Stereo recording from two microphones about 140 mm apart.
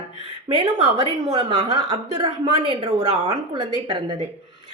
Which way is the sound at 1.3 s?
30° right (ahead or behind).